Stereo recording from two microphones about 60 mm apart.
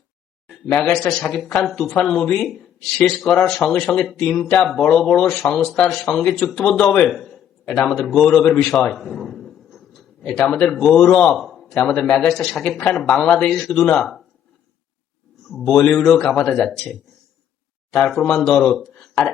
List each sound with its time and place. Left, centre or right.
0.4 s a sound: centre
1.3 s speech: centre
4.3 s speech: centre
4.9 s speech: centre
6.1 s a man's voice: centre
10.8 s a man's voice: centre
11.7 s speech: centre
15.4 s speech: centre